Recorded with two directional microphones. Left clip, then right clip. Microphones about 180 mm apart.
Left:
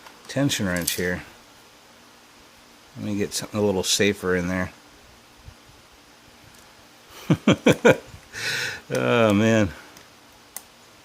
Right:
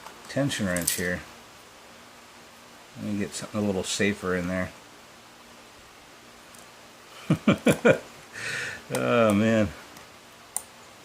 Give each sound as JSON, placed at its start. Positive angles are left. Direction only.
{"t": 0.3, "sound": "speech", "side_deg": 60}
{"t": 3.2, "sound": "speech", "side_deg": 60}
{"t": 7.3, "sound": "speech", "side_deg": 60}